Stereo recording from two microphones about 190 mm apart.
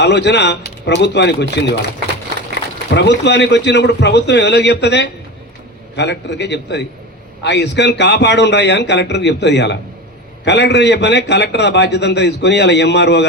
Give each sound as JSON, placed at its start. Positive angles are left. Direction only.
{"t": 0.0, "sound": "a man's voice", "side_deg": 65}
{"t": 2.9, "sound": "a man's voice", "side_deg": 65}